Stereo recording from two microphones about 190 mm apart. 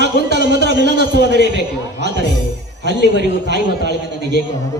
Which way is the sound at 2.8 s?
65° right (ahead or behind).